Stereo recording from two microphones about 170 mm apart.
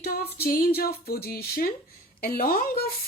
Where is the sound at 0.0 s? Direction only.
65° left (ahead or behind).